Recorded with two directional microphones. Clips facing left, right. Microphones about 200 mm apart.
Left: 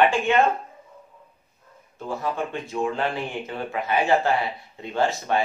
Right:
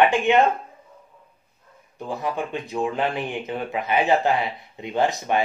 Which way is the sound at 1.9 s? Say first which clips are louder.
Right 1 dB; 15° right (ahead or behind).